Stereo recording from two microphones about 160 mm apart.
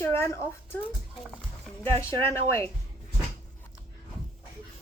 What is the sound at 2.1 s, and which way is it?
Speech, 35° right (ahead or behind).